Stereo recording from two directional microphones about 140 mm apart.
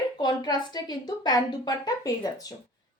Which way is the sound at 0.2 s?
30° left (ahead or behind).